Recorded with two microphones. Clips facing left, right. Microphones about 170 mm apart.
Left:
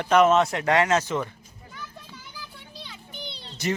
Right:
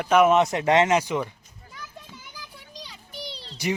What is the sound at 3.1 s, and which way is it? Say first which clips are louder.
Music: right 3 dB; 35° right (ahead or behind).